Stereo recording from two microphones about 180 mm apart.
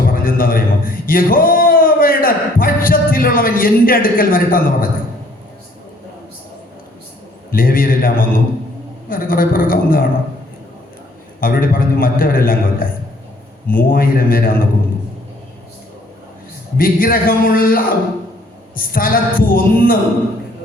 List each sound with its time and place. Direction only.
0.0 s a man's voice: 50° left (ahead or behind)
7.5 s a man's voice: 50° left (ahead or behind)
11.3 s a man's voice: 55° left (ahead or behind)
16.7 s a man's voice: 55° left (ahead or behind)